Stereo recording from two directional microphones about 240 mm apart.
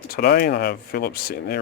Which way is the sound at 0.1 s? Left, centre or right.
Left.